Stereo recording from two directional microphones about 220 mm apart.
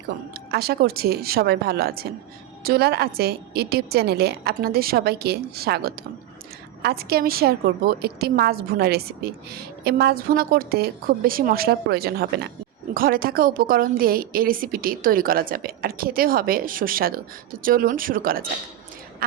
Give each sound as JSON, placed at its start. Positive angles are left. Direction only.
{"t": 0.3, "sound": "a woman's voice", "side_deg": -45}